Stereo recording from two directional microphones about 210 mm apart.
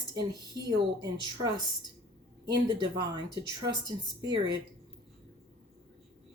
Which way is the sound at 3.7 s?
20° right (ahead or behind).